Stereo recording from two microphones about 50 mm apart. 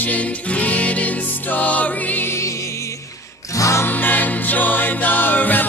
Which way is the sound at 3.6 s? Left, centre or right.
Left.